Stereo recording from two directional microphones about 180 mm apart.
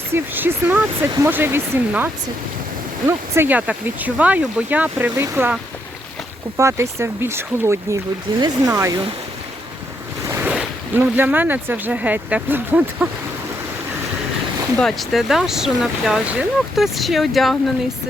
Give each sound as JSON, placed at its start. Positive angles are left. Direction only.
{"t": 0.1, "sound": "speech", "side_deg": -10}
{"t": 3.1, "sound": "speech", "side_deg": -15}
{"t": 6.6, "sound": "speech", "side_deg": -15}
{"t": 10.2, "sound": "speech", "side_deg": -10}
{"t": 14.8, "sound": "speech", "side_deg": 0}